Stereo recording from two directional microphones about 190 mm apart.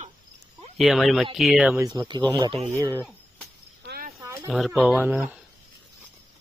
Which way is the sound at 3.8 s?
60° right (ahead or behind).